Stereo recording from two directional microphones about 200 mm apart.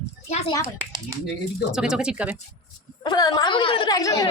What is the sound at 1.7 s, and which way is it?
Speech, 5° right (ahead or behind).